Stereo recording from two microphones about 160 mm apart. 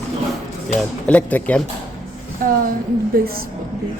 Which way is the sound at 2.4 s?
60° right (ahead or behind).